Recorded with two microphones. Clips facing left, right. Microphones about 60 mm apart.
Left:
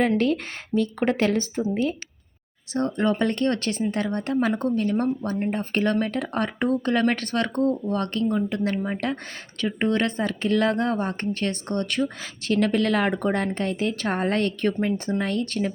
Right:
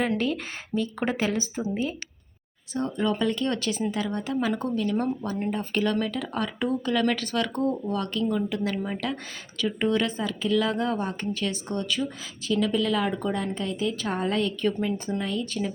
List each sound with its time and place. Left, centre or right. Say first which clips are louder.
0.0 s a woman's voice: left 5 dB; left
2.7 s a woman's voice: left 3 dB; left
10.1 s a woman's voice: left 2 dB; left